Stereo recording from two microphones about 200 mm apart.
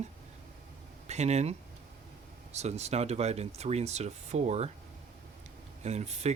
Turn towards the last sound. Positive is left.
turn(degrees=-35)  # may be behind; listen again after turning